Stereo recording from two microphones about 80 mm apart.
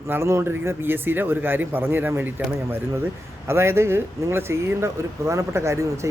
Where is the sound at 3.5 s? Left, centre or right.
Right.